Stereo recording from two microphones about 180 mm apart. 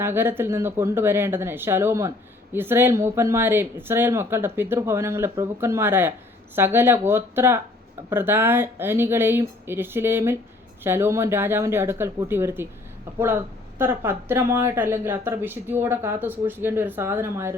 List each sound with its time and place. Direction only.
0.0 s speech: 15° right (ahead or behind)